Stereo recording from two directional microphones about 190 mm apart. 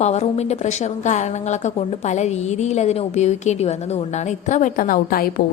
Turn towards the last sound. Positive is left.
turn(degrees=50)  # may be behind; listen again after turning